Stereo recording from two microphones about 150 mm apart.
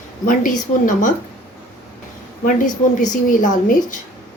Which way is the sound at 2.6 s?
60° left (ahead or behind).